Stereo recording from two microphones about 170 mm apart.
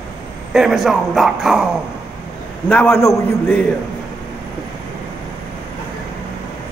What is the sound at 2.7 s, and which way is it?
Speech, 10° left (ahead or behind).